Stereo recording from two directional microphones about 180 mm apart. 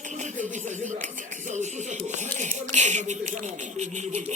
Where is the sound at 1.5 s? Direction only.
40° right (ahead or behind).